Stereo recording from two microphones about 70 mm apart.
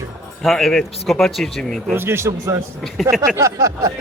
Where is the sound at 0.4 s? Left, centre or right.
Centre.